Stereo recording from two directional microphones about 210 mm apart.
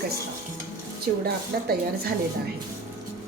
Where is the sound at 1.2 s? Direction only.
50° right (ahead or behind).